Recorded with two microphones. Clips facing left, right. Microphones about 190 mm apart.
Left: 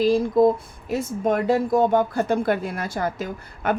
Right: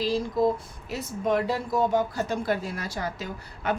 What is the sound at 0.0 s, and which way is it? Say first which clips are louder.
A woman's voice: left 7 dB; 50° left (ahead or behind).